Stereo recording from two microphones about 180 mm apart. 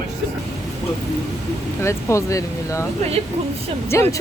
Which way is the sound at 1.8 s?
15° left (ahead or behind).